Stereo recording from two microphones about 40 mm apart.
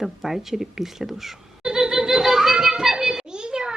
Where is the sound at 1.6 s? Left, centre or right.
Centre.